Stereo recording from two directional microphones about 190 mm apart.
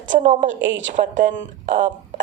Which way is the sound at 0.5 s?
75° right (ahead or behind).